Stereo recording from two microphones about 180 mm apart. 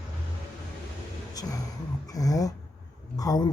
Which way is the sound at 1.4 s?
20° left (ahead or behind).